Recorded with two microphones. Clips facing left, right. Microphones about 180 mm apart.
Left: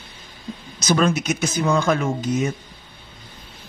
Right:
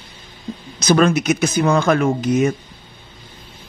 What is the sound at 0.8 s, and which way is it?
Speech, 65° right (ahead or behind).